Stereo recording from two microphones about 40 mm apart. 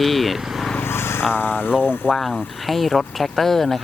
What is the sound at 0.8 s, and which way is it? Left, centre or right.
Speech, left.